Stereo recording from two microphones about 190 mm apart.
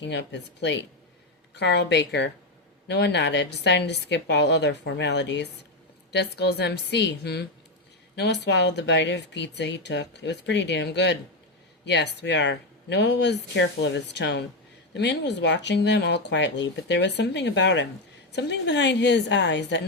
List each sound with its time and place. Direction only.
0.0 s a woman's voice: 65° left (ahead or behind)